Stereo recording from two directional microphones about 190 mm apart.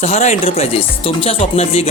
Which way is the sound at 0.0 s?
35° left (ahead or behind).